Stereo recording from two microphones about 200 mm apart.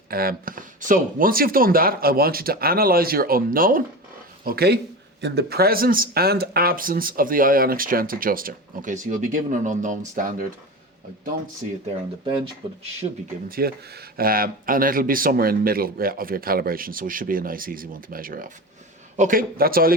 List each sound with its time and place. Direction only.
0.1 s speech: 50° right (ahead or behind)
13.0 s speech: 30° right (ahead or behind)
13.5 s speech: 50° right (ahead or behind)